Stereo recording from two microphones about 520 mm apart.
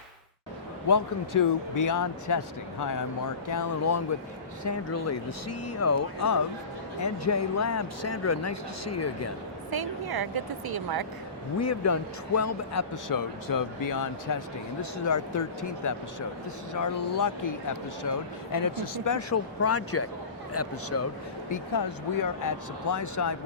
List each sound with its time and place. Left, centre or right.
0.9 s speech: left
3.4 s speech: left
9.7 s a woman's voice: right
11.6 s speech: left
21.5 s speech: left